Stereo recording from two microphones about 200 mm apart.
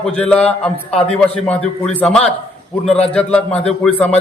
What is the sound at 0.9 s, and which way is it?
Speech, 30° left (ahead or behind).